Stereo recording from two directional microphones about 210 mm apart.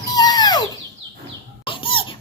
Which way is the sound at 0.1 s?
20° left (ahead or behind).